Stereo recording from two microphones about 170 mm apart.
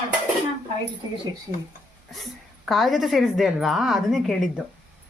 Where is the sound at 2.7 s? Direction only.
Centre (ahead or behind).